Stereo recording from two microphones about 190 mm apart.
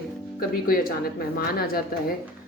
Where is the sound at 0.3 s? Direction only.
50° left (ahead or behind).